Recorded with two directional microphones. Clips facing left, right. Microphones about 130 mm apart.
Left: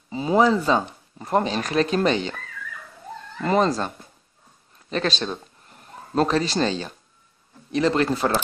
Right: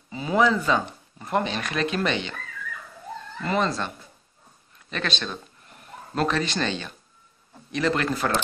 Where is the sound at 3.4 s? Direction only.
35° left (ahead or behind).